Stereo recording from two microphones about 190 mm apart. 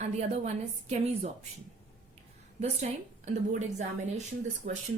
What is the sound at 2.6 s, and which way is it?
A woman's voice, 35° right (ahead or behind).